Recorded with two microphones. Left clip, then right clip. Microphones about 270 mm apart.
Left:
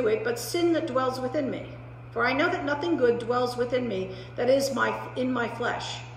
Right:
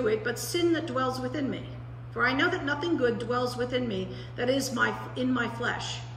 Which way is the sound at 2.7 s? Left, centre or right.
Left.